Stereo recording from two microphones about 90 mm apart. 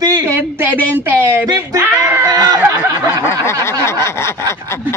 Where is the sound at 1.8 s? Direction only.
25° right (ahead or behind).